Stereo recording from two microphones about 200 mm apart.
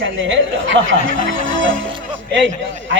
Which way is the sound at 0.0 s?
70° right (ahead or behind).